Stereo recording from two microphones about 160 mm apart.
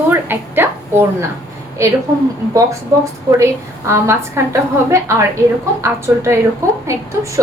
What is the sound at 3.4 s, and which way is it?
A woman's voice, 15° right (ahead or behind).